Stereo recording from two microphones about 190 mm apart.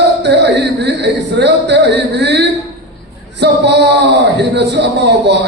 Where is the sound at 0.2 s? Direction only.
65° right (ahead or behind).